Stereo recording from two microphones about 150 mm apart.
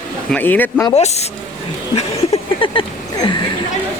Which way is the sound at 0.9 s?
45° left (ahead or behind).